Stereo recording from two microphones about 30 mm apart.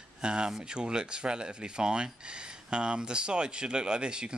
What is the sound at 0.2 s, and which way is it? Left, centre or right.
Speech, right.